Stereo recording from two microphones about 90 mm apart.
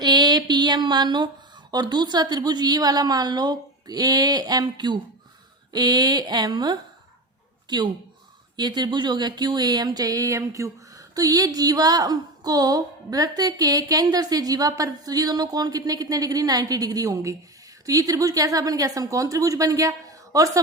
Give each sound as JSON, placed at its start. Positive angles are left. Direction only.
{"t": 0.0, "sound": "mantra", "side_deg": -50}
{"t": 1.7, "sound": "speech", "side_deg": -55}
{"t": 8.5, "sound": "a woman's voice", "side_deg": -50}